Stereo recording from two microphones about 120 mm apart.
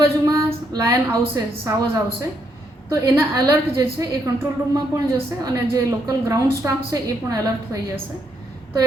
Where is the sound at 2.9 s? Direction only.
30° right (ahead or behind).